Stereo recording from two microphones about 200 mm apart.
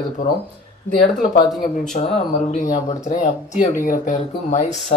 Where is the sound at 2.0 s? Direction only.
35° left (ahead or behind).